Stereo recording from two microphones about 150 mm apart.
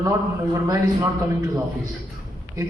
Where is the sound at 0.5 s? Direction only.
20° right (ahead or behind).